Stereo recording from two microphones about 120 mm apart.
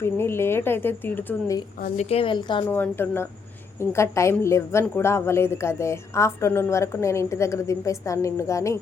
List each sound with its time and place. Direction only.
0.0 s a woman's voice: 20° left (ahead or behind)
2.0 s a woman's voice: 55° left (ahead or behind); by 2.6 s 40° left (ahead or behind)
2.6 s a woman's voice: 15° left (ahead or behind)